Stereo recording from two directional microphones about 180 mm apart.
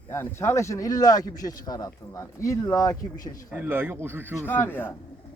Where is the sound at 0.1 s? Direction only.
15° left (ahead or behind).